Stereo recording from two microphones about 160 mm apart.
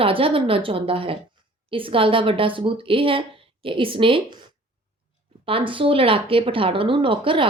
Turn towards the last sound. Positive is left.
turn(degrees=-30)  # may be behind; listen again after turning